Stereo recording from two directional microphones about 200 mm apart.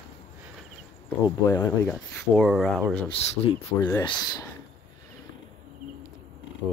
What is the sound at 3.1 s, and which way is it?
Speech, 25° left (ahead or behind).